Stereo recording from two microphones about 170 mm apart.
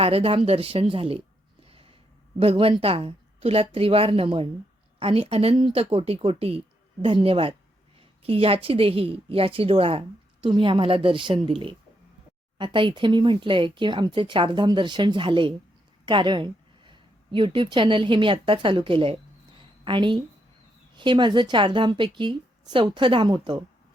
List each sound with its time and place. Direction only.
0.0 s a woman's voice: 35° right (ahead or behind)
1.6 s a sound: 35° right (ahead or behind)
2.4 s a woman's voice: 35° right (ahead or behind)
12.5 s a woman's voice: 30° right (ahead or behind)